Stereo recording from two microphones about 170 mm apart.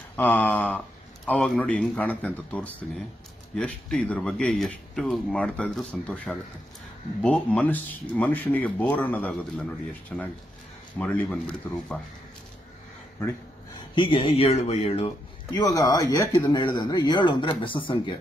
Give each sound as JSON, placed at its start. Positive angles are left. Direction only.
{"t": 0.1, "sound": "speech", "side_deg": 10}
{"t": 13.9, "sound": "speech", "side_deg": 30}